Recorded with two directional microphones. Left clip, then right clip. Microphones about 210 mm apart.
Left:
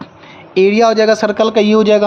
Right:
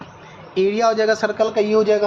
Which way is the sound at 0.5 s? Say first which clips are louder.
Left 7 dB; 45° left (ahead or behind).